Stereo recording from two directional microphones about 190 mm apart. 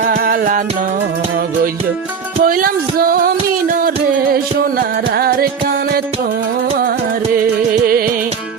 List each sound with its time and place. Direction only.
0.1 s music: 45° right (ahead or behind)
2.4 s music: 50° right (ahead or behind)
7.9 s music: 50° right (ahead or behind)